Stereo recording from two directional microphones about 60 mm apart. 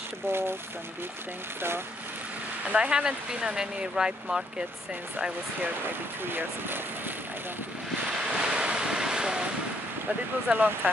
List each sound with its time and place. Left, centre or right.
2.7 s speech: centre
5.6 s speech: right
8.3 s waves: centre
10.5 s speech: right